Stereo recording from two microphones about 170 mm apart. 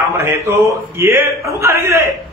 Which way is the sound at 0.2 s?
15° right (ahead or behind).